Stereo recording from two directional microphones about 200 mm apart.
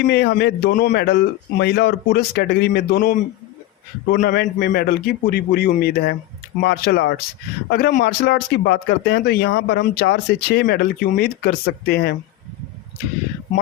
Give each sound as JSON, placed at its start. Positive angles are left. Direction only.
{"t": 0.0, "sound": "speech", "side_deg": 60}